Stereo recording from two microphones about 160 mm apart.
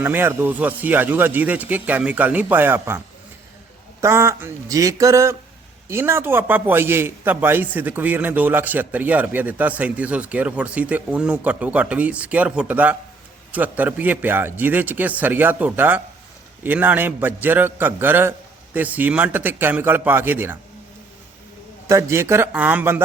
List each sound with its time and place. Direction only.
0.0 s a man's voice: 15° right (ahead or behind)
4.0 s a man's voice: 15° right (ahead or behind)
21.8 s a man's voice: 15° right (ahead or behind)